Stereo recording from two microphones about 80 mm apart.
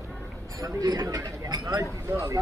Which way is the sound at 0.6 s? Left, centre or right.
Right.